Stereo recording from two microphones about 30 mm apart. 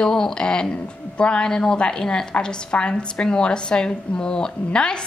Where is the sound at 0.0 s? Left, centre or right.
Centre.